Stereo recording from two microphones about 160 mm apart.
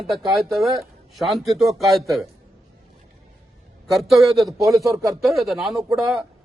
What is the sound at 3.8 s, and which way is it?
Speech, centre (ahead or behind).